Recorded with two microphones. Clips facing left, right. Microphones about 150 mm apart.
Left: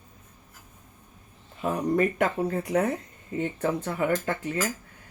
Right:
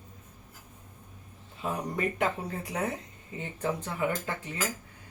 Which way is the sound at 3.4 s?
60° left (ahead or behind).